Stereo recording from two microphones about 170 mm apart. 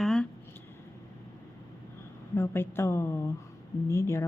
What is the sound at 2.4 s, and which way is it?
A woman's voice, 15° left (ahead or behind).